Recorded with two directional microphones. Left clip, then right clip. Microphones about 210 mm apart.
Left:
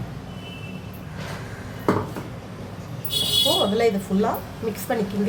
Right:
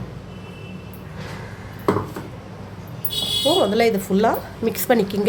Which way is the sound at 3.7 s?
45° right (ahead or behind).